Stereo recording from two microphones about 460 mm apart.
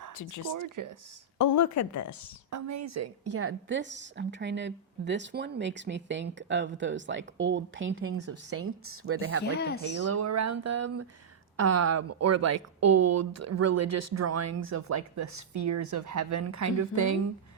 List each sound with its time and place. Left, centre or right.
0.2 s speech: left
0.5 s speech: right
1.4 s speech: left
2.5 s a woman's voice: right
9.4 s speech: left
10.1 s speech: right